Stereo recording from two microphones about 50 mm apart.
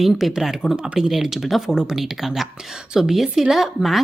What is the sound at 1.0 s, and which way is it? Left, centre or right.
A woman's voice, centre.